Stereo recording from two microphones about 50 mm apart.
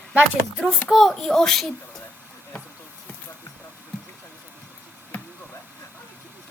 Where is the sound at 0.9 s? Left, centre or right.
Centre.